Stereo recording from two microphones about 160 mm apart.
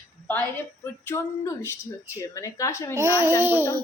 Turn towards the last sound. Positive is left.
turn(degrees=-15)  # may be behind; listen again after turning